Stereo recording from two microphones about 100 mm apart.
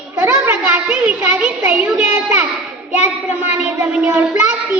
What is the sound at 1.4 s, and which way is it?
Child singing, 15° right (ahead or behind).